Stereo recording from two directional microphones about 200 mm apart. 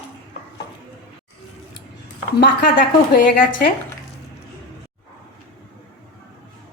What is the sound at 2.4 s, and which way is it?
Speech, 40° left (ahead or behind).